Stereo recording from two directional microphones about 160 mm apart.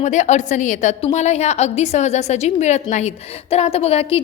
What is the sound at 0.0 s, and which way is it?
A woman's voice, 50° left (ahead or behind).